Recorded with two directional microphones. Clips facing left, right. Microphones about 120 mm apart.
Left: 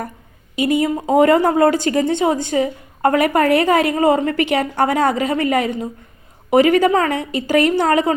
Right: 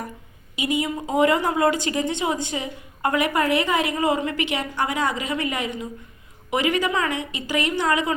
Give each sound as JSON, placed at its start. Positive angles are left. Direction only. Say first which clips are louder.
{"t": 0.5, "sound": "speech", "louder": "left 7 dB", "side_deg": 45}